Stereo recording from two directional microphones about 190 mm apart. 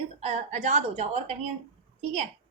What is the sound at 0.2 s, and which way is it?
A woman's voice, 35° right (ahead or behind).